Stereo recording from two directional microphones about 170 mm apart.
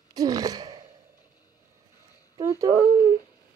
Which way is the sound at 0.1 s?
20° right (ahead or behind).